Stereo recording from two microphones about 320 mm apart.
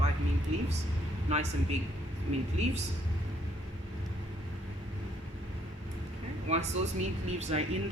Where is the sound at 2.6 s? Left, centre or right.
Right.